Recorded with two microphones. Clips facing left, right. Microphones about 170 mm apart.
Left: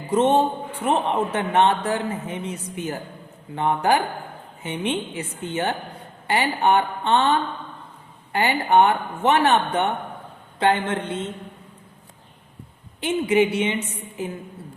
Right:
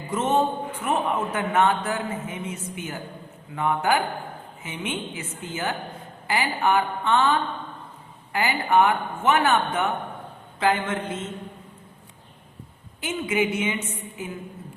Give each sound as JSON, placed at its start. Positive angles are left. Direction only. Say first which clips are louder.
{"t": 0.1, "sound": "a man's voice", "louder": "left 4 dB", "side_deg": 30}
{"t": 13.3, "sound": "a man's voice", "louder": "left 4 dB", "side_deg": 30}